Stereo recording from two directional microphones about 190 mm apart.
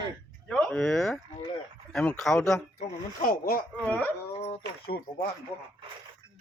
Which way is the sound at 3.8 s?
5° left (ahead or behind).